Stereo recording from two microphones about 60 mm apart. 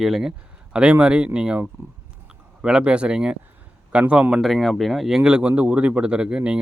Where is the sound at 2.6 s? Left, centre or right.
Centre.